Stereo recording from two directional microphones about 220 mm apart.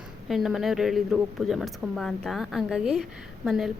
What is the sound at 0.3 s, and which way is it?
Speech, centre (ahead or behind).